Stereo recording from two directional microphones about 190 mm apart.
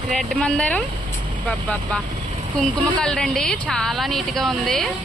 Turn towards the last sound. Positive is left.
turn(degrees=0)  # may be behind; listen again after turning